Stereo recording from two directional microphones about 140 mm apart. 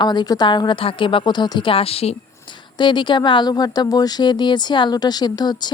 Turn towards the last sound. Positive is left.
turn(degrees=30)  # may be behind; listen again after turning